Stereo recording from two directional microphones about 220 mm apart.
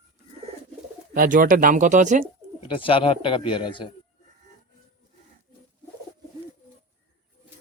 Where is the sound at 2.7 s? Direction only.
25° left (ahead or behind).